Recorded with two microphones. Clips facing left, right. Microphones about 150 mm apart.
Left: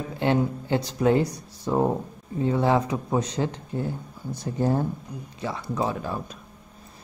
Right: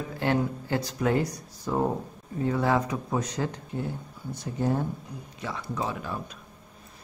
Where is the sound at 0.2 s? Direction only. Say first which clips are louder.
Left 3 dB; 20° left (ahead or behind).